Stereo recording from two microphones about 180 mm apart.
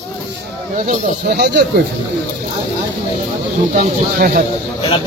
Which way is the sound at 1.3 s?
65° right (ahead or behind).